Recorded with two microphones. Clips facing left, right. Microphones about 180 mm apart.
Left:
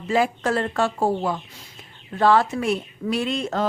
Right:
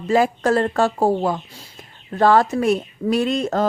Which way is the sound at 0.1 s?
40° right (ahead or behind).